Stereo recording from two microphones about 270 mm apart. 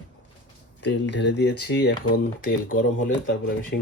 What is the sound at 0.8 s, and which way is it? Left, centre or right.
Speech, left.